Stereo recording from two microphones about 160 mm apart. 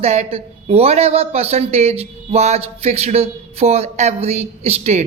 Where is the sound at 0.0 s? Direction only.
40° right (ahead or behind).